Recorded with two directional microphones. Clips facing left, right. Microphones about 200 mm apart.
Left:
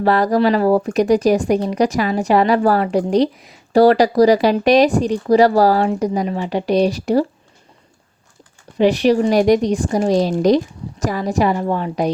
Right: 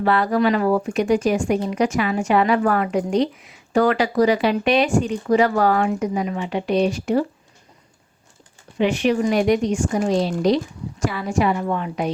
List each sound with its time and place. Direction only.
0.0 s speech: 35° left (ahead or behind)
8.8 s speech: 35° left (ahead or behind)